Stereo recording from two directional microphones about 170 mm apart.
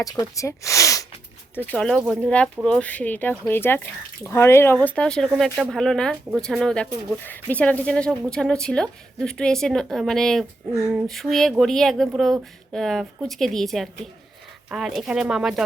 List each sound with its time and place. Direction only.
0.0 s speech: 20° left (ahead or behind)
1.5 s speech: 10° left (ahead or behind)